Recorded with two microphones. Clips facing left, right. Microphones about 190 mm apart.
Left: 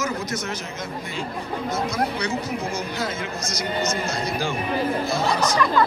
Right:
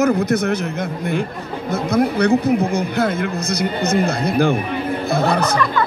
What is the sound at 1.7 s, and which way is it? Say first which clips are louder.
Speech: right 9 dB; 60° right (ahead or behind).